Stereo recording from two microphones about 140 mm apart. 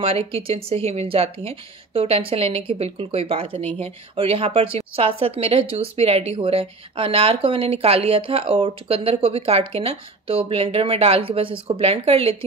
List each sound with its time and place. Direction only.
0.0 s a woman's voice: 45° right (ahead or behind)